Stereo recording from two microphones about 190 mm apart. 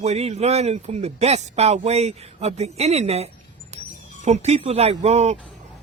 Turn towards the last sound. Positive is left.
turn(degrees=-35)  # may be behind; listen again after turning